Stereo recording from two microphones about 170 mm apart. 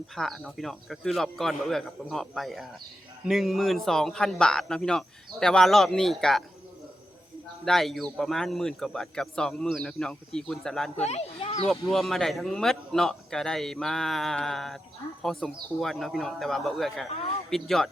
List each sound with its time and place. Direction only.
0.2 s speech: centre (ahead or behind)
7.6 s speech: centre (ahead or behind)
11.0 s a sound: 40° left (ahead or behind)
11.9 s speech: centre (ahead or behind)
17.1 s a man's voice: 35° left (ahead or behind)
17.5 s speech: centre (ahead or behind)